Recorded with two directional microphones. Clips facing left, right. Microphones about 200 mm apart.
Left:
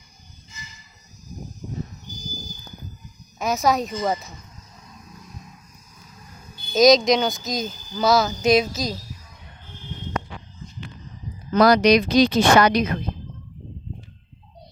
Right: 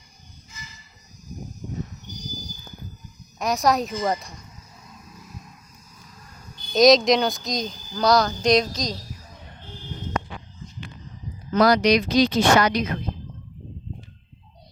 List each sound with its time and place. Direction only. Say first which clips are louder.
3.3 s speech: even; centre (ahead or behind)
6.7 s speech: even; centre (ahead or behind)
11.5 s speech: left 2 dB; 60° left (ahead or behind)